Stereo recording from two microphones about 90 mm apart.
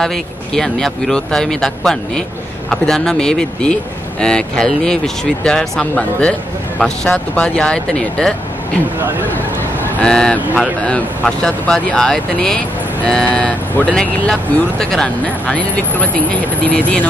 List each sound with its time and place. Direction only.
0.0 s speech: 5° left (ahead or behind)
9.9 s speech: 10° left (ahead or behind)